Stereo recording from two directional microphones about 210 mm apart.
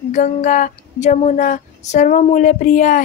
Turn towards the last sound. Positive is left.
turn(degrees=40)  # may be behind; listen again after turning